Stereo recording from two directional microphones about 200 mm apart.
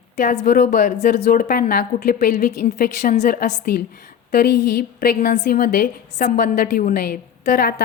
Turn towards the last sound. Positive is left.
turn(degrees=45)  # may be behind; listen again after turning